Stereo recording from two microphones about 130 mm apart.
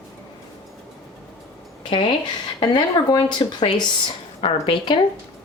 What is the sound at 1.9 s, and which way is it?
Speech, 40° left (ahead or behind).